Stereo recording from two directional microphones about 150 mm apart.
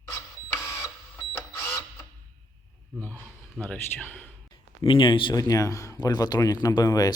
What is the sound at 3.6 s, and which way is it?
Speech, 10° left (ahead or behind).